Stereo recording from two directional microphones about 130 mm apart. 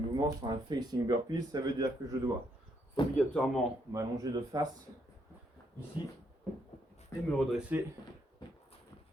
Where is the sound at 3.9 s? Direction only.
30° right (ahead or behind).